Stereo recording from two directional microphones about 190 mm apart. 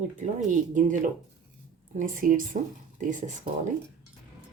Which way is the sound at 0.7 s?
45° right (ahead or behind).